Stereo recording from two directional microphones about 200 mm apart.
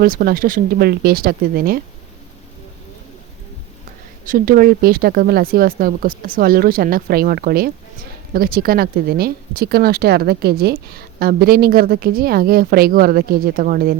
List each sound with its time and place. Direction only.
0.0 s speech: 45° right (ahead or behind)
4.3 s speech: 45° right (ahead or behind)